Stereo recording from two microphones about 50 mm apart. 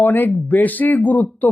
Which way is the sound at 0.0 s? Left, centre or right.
Left.